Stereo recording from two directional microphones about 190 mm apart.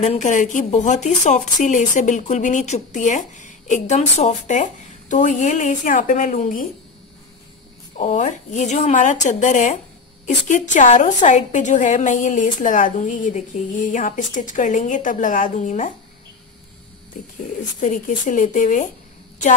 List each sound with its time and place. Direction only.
0.0 s speech: 40° left (ahead or behind)
8.0 s speech: 40° left (ahead or behind)
17.7 s speech: 40° left (ahead or behind)